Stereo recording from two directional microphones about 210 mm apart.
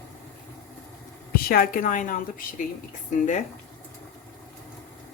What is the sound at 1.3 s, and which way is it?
Speech, 45° left (ahead or behind).